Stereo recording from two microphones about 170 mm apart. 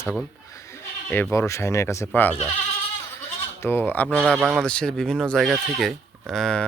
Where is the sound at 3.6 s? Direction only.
10° left (ahead or behind).